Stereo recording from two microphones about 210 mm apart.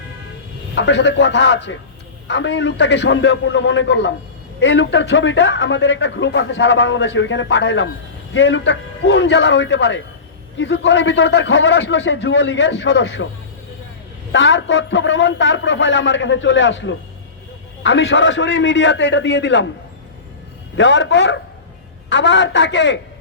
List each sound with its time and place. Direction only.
0.8 s a man's voice: 60° left (ahead or behind)
14.3 s a man's voice: 60° left (ahead or behind)
20.7 s a man's voice: 60° left (ahead or behind)